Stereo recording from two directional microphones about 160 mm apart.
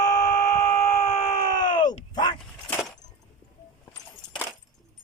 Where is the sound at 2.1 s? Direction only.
25° left (ahead or behind).